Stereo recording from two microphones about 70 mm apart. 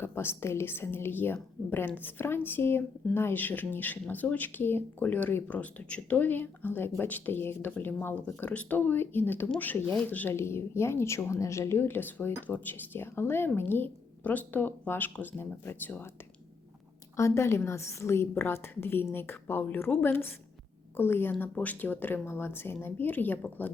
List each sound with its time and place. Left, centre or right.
0.0 s a woman's voice: left
10.3 s a woman's voice: left
17.2 s a woman's voice: left